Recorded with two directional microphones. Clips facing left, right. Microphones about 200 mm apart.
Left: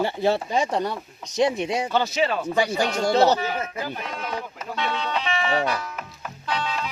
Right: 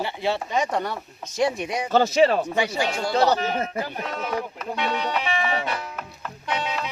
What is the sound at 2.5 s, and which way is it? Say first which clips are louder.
Speech: left 2 dB; 40° left (ahead or behind).